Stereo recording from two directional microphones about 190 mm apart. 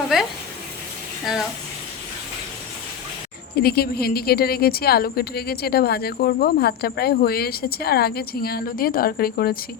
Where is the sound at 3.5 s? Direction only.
55° left (ahead or behind).